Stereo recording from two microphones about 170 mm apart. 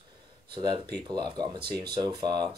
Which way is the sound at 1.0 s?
25° right (ahead or behind).